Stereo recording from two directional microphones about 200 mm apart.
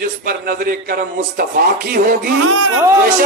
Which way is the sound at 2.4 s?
80° right.